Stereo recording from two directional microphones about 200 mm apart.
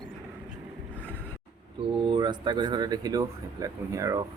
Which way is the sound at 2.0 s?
25° right (ahead or behind).